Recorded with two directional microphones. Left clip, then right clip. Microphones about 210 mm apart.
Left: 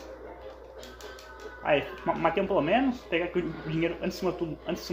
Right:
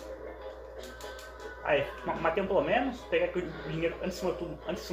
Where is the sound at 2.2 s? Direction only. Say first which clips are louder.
Left 1 dB; 50° left (ahead or behind).